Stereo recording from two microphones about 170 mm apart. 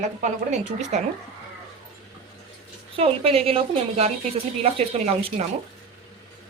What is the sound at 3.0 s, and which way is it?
A woman's voice, 35° right (ahead or behind).